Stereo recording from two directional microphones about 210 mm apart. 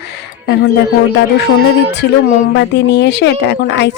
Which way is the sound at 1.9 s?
55° left (ahead or behind).